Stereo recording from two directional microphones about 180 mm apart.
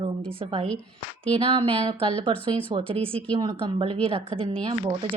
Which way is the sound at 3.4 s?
20° right (ahead or behind).